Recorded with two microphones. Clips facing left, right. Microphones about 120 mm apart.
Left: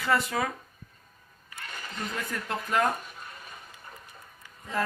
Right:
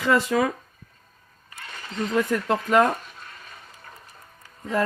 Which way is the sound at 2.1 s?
90° right.